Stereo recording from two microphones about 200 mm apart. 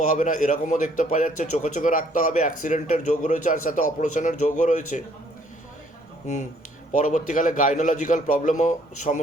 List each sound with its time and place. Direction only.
0.0 s a man's voice: 40° left (ahead or behind)
6.9 s a man's voice: 40° left (ahead or behind)